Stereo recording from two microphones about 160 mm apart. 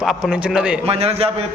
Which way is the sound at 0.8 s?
40° right (ahead or behind).